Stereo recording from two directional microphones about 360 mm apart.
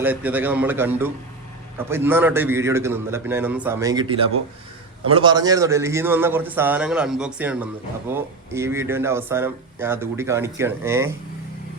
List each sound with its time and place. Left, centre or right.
0.0 s a man's voice: centre